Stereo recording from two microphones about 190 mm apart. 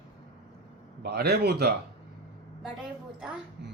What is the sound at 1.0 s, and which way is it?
Speech, 60° right (ahead or behind).